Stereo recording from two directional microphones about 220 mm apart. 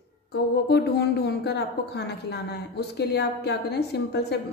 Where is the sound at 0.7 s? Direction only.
50° left (ahead or behind).